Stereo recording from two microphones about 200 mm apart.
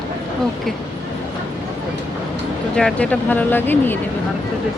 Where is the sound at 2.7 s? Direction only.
5° left (ahead or behind).